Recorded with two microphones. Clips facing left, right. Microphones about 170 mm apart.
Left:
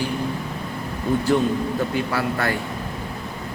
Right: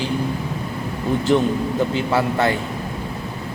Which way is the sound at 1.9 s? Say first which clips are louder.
Right 3 dB; 20° right (ahead or behind).